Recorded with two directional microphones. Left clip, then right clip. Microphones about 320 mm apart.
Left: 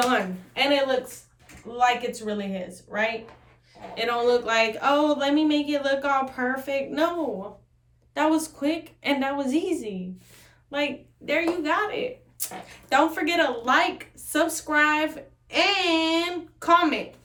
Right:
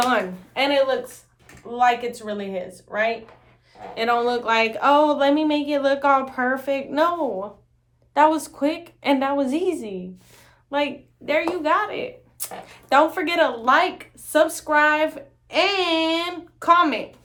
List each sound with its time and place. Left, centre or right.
0.0 s a woman's voice: centre
8.1 s a woman's voice: centre